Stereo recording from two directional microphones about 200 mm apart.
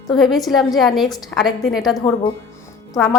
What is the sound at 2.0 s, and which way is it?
Speech, 25° left (ahead or behind).